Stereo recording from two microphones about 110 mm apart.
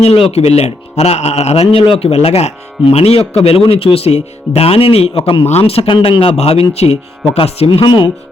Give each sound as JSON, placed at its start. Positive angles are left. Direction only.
{"t": 0.0, "sound": "speech", "side_deg": 65}
{"t": 5.5, "sound": "speech", "side_deg": 70}